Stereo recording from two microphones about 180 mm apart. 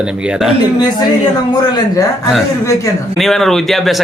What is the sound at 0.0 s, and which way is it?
Speech, 5° right (ahead or behind).